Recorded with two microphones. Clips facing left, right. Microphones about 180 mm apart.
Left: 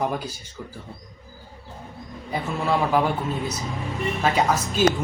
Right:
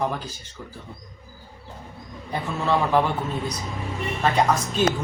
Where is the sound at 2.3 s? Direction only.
10° left (ahead or behind).